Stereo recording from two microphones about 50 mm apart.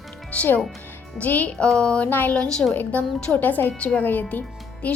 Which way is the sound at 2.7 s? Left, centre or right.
Left.